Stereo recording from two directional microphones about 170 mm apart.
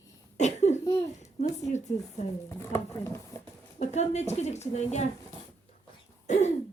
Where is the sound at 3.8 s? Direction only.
40° left (ahead or behind).